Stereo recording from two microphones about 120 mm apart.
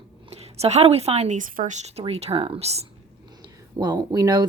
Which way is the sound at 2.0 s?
55° right (ahead or behind).